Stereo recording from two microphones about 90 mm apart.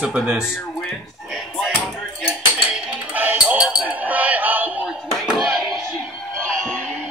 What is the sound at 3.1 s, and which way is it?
Music, 20° right (ahead or behind).